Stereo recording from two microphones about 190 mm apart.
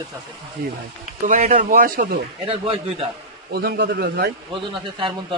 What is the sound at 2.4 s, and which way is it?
Speech, 30° right (ahead or behind).